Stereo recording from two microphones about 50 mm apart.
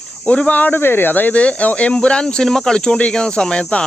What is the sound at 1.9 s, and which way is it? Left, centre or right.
Speech, centre.